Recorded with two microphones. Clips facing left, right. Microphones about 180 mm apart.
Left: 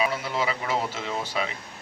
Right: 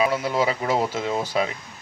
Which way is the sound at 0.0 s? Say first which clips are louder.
Right 5 dB; 40° right (ahead or behind).